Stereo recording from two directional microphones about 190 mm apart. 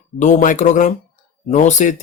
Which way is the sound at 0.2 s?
40° left (ahead or behind).